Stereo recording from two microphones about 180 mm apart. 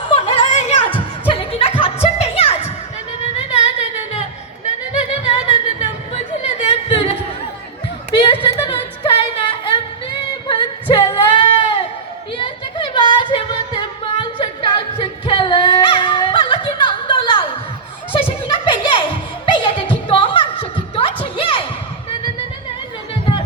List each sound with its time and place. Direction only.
0.1 s music: 30° left (ahead or behind)
5.2 s music: 35° left (ahead or behind)
6.4 s singing: 35° left (ahead or behind)
8.1 s a sound: 30° left (ahead or behind)
14.3 s singing: 30° left (ahead or behind)
18.1 s music: 30° left (ahead or behind)